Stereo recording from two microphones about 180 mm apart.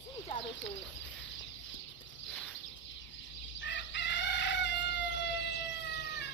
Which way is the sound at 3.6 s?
80° left.